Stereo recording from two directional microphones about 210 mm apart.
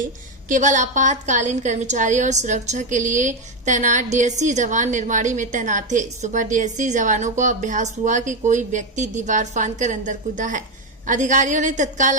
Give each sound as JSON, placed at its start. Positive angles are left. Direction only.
{"t": 0.4, "sound": "a woman's voice", "side_deg": -35}